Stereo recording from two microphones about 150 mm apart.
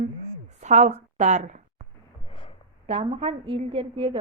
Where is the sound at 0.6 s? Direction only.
50° right (ahead or behind).